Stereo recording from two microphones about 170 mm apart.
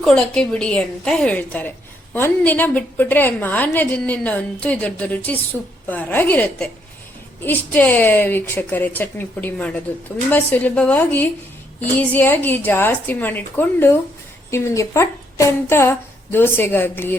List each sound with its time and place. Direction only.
0.0 s a woman's voice: 5° left (ahead or behind)